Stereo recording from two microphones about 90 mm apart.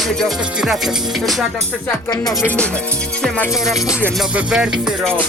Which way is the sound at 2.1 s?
50° left (ahead or behind).